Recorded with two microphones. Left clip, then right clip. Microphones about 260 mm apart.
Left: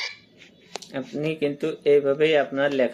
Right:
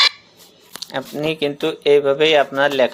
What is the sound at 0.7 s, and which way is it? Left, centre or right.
Speech, centre.